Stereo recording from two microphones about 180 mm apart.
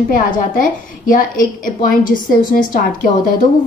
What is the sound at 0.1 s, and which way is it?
A woman's voice, 50° left (ahead or behind).